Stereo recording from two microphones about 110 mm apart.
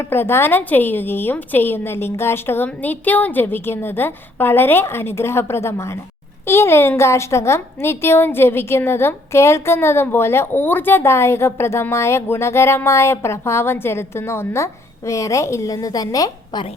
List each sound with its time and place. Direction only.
0.0 s a woman's voice: 20° left (ahead or behind); by 16.6 s 35° left (ahead or behind)